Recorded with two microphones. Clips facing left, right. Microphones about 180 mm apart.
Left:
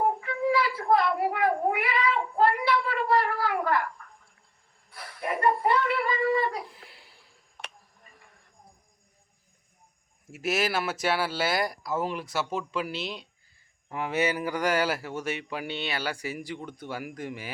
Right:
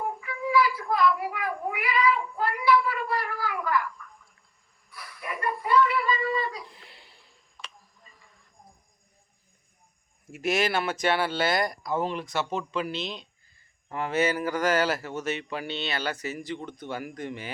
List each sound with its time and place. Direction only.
0.3 s child singing: 25° left (ahead or behind)
0.9 s a sound: 60° left (ahead or behind)
1.7 s cat: 25° left (ahead or behind)
3.1 s cat: 65° left (ahead or behind)
4.9 s dog: 25° left (ahead or behind)
5.5 s a sound: 60° left (ahead or behind)
6.7 s a sound: 5° left (ahead or behind)
7.5 s tick: 60° left (ahead or behind)
10.3 s speech: 5° left (ahead or behind)